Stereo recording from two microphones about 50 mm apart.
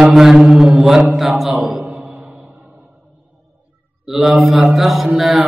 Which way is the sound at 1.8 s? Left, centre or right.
Right.